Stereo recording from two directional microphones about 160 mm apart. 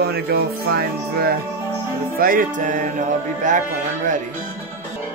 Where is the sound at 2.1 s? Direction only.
60° right (ahead or behind).